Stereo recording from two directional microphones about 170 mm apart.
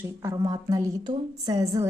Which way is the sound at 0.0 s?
15° right (ahead or behind).